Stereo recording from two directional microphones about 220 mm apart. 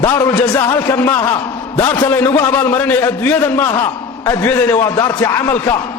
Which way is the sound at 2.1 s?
10° left (ahead or behind).